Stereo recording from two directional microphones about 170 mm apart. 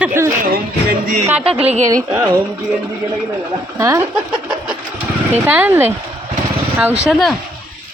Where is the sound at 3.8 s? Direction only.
15° right (ahead or behind).